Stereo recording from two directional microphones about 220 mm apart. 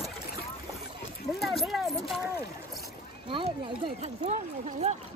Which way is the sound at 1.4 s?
Centre (ahead or behind).